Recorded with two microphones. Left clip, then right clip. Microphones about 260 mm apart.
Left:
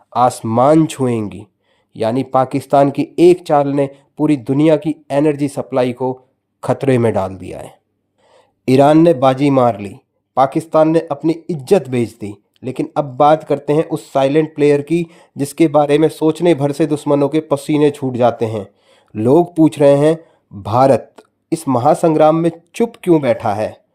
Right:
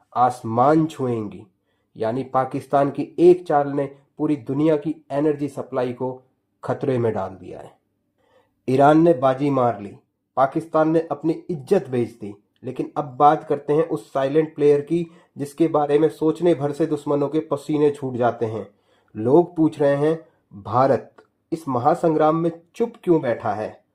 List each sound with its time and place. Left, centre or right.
0.1 s speech: left